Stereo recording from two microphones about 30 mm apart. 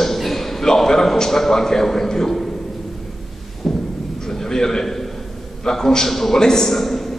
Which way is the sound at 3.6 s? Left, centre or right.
Centre.